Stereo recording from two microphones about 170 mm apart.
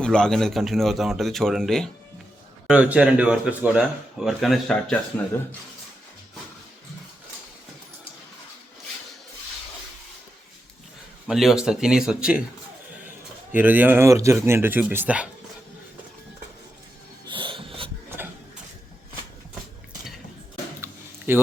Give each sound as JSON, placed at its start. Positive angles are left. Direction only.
{"t": 0.0, "sound": "speech", "side_deg": 5}
{"t": 11.3, "sound": "speech", "side_deg": 0}
{"t": 13.5, "sound": "speech", "side_deg": -10}
{"t": 17.2, "sound": "snort", "side_deg": -30}
{"t": 20.8, "sound": "a sound", "side_deg": -15}